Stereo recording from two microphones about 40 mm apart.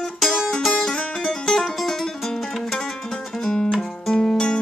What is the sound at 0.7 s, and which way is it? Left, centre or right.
Music, centre.